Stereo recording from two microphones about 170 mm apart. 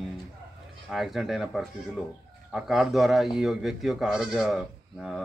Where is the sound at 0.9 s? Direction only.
Centre (ahead or behind).